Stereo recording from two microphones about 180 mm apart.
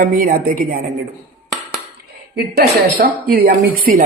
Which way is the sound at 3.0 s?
55° right (ahead or behind).